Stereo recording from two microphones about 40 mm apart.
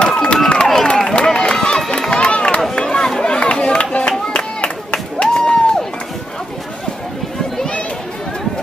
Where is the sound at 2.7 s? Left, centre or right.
Centre.